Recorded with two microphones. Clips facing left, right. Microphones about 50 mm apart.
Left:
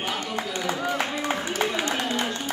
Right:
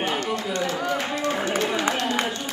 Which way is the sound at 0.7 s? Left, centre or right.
Centre.